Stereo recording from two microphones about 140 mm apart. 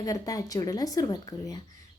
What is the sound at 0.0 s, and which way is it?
Speech, 25° left (ahead or behind).